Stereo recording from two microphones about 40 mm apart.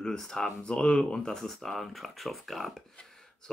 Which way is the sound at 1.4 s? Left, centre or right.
Centre.